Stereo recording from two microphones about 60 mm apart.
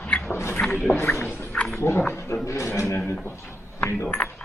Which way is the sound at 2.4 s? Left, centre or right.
Left.